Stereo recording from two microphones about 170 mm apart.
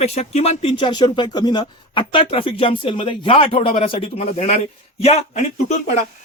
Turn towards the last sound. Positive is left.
turn(degrees=40)  # may be behind; listen again after turning